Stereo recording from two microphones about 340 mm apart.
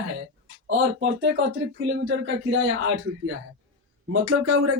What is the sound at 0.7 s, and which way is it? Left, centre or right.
Speech, right.